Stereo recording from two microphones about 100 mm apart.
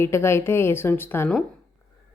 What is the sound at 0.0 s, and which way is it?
A woman's voice, 25° left (ahead or behind).